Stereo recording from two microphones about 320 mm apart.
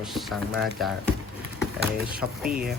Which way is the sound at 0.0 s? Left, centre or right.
Centre.